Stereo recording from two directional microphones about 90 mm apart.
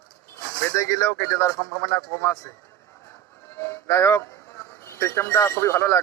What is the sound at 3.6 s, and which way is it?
Speech, 25° left (ahead or behind).